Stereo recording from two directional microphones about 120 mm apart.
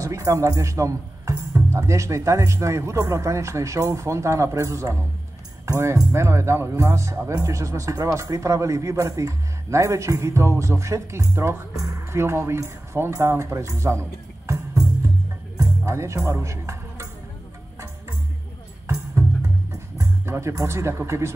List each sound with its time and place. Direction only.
0.0 s a man's voice: 25° right (ahead or behind)
20.0 s speech: 25° right (ahead or behind)